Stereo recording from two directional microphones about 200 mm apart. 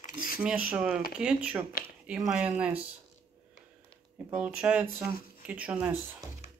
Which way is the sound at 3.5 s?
5° right (ahead or behind).